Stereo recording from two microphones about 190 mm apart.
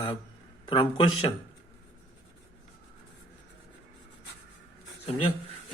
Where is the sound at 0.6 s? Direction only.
25° left (ahead or behind).